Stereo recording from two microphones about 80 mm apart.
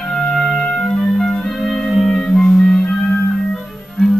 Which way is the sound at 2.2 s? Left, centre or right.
Centre.